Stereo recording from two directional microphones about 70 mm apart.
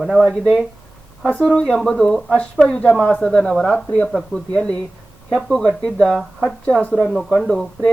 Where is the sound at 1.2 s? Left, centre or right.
Centre.